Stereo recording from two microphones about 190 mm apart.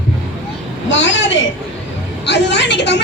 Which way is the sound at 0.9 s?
70° left (ahead or behind).